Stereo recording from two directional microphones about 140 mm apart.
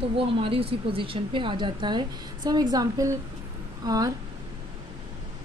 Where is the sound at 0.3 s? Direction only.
40° right (ahead or behind).